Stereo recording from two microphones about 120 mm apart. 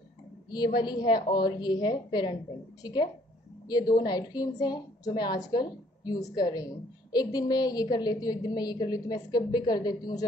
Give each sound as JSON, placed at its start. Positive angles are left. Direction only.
{"t": 0.5, "sound": "a woman's voice", "side_deg": 35}